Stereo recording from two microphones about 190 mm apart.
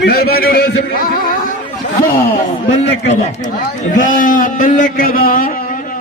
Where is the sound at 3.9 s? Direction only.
45° left (ahead or behind).